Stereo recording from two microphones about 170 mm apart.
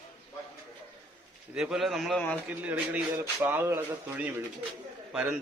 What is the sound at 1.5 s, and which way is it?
Speech, 5° right (ahead or behind).